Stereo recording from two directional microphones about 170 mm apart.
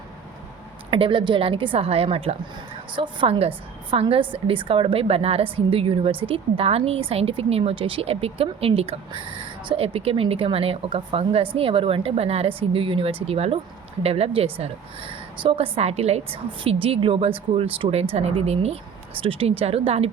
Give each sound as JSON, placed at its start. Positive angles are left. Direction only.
{"t": 0.9, "sound": "a woman's voice", "side_deg": -30}